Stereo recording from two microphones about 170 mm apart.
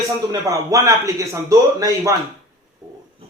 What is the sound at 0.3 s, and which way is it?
A man's voice, 20° right (ahead or behind).